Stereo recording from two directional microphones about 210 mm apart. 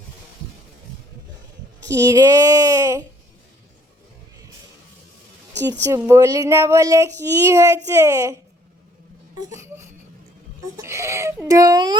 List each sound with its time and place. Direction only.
1.9 s a woman's voice: 15° right (ahead or behind)
5.8 s a woman's voice: 15° right (ahead or behind)
9.5 s a woman's voice: 15° right (ahead or behind)